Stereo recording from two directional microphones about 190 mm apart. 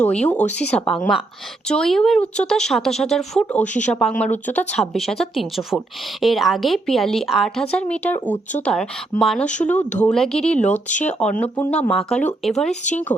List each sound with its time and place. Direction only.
0.0 s speech: 5° left (ahead or behind)